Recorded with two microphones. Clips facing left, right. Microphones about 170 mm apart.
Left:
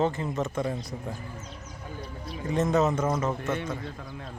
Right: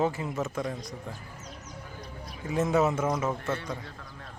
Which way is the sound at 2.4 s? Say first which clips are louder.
Left 1 dB; 10° right (ahead or behind).